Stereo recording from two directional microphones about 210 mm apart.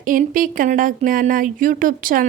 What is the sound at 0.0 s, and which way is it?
A woman's voice, 40° right (ahead or behind).